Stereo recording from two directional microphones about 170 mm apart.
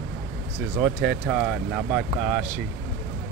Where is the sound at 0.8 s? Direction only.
Centre (ahead or behind).